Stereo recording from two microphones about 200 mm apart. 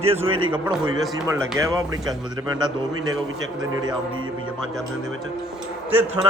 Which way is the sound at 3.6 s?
20° right (ahead or behind).